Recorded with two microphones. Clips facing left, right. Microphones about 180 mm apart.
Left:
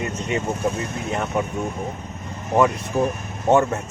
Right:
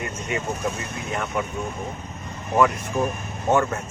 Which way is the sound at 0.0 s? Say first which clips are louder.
Left 3 dB; 25° left (ahead or behind).